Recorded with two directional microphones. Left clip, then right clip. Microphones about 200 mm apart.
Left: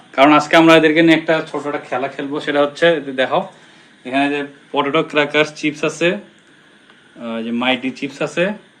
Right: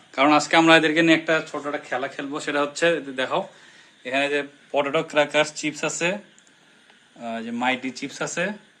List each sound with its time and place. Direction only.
0.1 s speech: 25° right (ahead or behind); by 3.4 s 40° right (ahead or behind)
4.0 s speech: 50° right (ahead or behind)
7.2 s speech: 30° right (ahead or behind)